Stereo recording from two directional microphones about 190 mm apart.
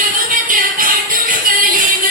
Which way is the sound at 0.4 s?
45° right (ahead or behind).